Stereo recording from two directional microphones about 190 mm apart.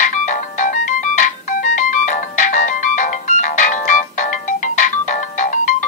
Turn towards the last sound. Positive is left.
turn(degrees=40)  # may be behind; listen again after turning